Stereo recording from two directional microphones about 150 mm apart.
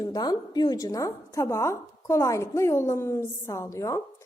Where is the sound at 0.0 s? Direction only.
25° left (ahead or behind).